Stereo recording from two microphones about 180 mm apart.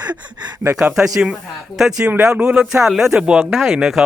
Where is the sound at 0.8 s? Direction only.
5° right (ahead or behind).